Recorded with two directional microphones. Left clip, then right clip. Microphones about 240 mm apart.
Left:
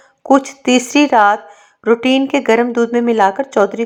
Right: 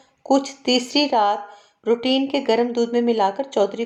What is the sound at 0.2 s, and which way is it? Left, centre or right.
A woman's voice, left.